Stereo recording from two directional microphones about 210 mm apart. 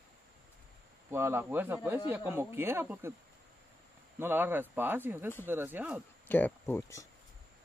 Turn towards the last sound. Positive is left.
turn(degrees=10)  # may be behind; listen again after turning